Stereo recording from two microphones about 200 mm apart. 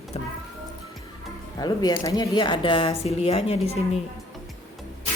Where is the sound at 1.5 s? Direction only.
20° left (ahead or behind).